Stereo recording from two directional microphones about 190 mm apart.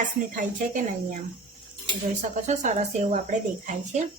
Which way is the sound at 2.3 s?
40° right (ahead or behind).